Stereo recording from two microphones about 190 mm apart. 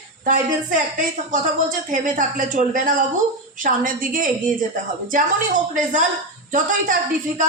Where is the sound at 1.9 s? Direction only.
45° right (ahead or behind).